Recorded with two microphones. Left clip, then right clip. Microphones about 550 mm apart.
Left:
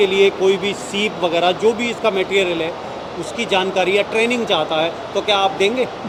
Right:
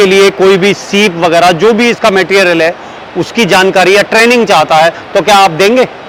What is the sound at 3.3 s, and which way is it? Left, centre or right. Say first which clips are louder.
A man's voice: right 11 dB; right.